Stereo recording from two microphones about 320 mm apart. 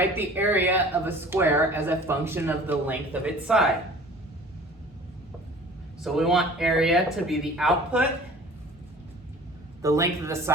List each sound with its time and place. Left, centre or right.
0.2 s speech: centre
6.0 s speech: centre
9.8 s speech: centre